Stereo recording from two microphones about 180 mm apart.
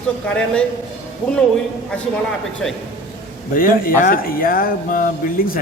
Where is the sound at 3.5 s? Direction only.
50° left (ahead or behind).